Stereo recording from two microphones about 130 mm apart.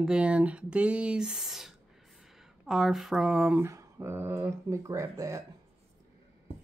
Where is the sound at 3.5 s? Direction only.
20° right (ahead or behind).